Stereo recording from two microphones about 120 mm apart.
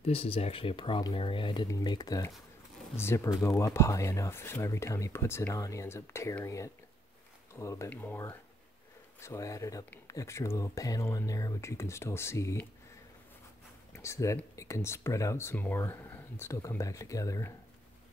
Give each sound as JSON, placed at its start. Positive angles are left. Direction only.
{"t": 0.0, "sound": "speech", "side_deg": 55}
{"t": 3.3, "sound": "speech", "side_deg": 25}
{"t": 13.9, "sound": "speech", "side_deg": 25}